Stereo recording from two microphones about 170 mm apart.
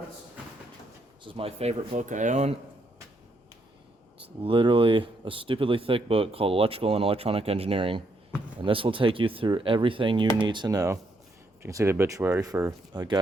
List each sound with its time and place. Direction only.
1.2 s speech: 30° right (ahead or behind)
4.4 s speech: 30° right (ahead or behind)